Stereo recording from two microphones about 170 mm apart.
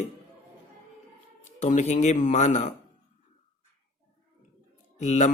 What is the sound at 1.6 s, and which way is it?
Speech, 45° left (ahead or behind).